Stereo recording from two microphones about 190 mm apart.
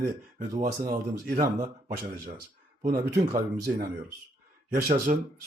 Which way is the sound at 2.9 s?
50° right (ahead or behind).